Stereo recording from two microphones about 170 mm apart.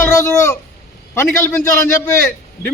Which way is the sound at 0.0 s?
15° left (ahead or behind).